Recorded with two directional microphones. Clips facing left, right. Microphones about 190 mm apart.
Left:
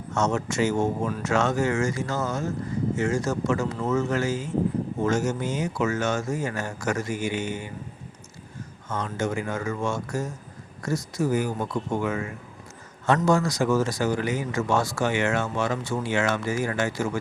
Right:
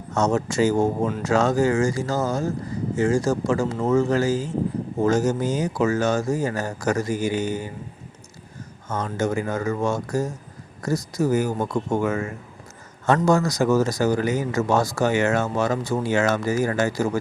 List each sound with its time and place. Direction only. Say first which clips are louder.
0.1 s speech: right 4 dB; 35° right (ahead or behind)
8.9 s speech: right 3 dB; 40° right (ahead or behind)